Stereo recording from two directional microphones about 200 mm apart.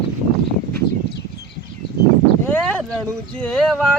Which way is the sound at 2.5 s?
5° left (ahead or behind).